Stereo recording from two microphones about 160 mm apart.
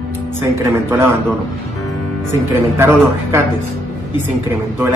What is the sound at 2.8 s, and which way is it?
Speech, 15° right (ahead or behind).